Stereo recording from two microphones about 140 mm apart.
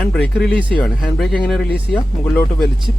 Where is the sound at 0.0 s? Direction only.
5° left (ahead or behind).